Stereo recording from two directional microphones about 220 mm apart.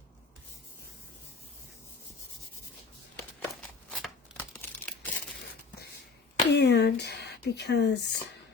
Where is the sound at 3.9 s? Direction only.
5° left (ahead or behind).